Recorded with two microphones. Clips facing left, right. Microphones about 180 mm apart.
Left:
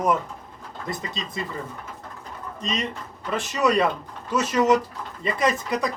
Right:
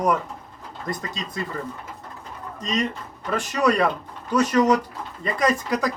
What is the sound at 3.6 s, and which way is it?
Speech, 5° left (ahead or behind).